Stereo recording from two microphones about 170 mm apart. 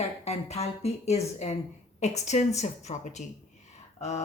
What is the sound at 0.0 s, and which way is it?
A woman's voice, 40° left (ahead or behind).